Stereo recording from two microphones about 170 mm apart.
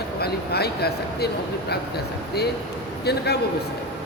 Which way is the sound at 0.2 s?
70° left (ahead or behind).